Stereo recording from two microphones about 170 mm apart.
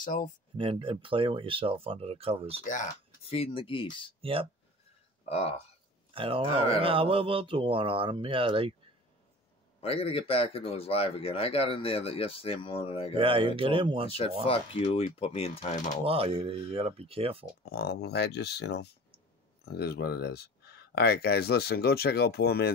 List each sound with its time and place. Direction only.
0.0 s speech: 50° left (ahead or behind)
0.6 s speech: 30° right (ahead or behind)
2.6 s speech: 50° left (ahead or behind); by 4.1 s 30° left (ahead or behind)
4.2 s speech: 35° right (ahead or behind)
5.3 s speech: 40° left (ahead or behind)
6.1 s speech: 30° right (ahead or behind)
9.8 s speech: 35° left (ahead or behind)
13.2 s speech: 30° right (ahead or behind)
14.4 s speech: 35° left (ahead or behind)
16.1 s speech: 35° right (ahead or behind)
17.6 s speech: 65° left (ahead or behind)